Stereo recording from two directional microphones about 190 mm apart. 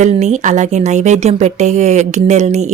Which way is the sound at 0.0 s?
35° right (ahead or behind).